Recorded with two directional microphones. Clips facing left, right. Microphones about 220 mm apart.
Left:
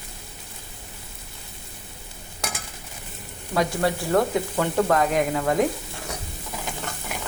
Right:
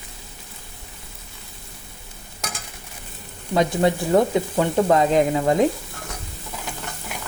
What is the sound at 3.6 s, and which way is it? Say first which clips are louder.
Frying: right 4 dB; 20° right (ahead or behind).